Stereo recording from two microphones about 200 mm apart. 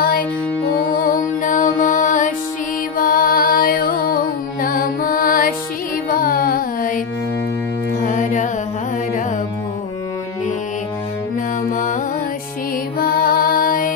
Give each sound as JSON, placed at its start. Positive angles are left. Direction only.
{"t": 0.9, "sound": "music", "side_deg": 40}
{"t": 8.0, "sound": "music", "side_deg": 40}
{"t": 11.7, "sound": "music", "side_deg": 40}
{"t": 13.0, "sound": "music", "side_deg": 45}